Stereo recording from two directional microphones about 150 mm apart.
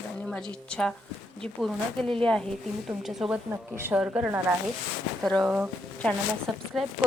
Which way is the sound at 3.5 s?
15° right (ahead or behind).